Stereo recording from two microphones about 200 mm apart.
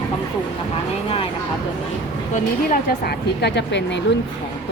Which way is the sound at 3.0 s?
55° left (ahead or behind).